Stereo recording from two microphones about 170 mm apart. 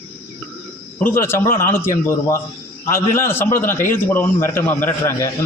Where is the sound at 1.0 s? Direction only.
15° left (ahead or behind).